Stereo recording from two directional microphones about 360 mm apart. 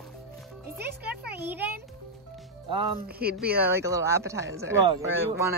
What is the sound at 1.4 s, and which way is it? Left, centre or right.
Speech, centre.